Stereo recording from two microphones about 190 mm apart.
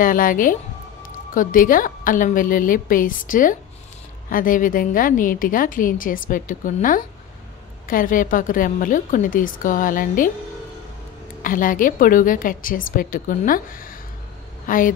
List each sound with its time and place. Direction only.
0.0 s a woman's voice: 45° left (ahead or behind)
11.4 s a woman's voice: 45° left (ahead or behind)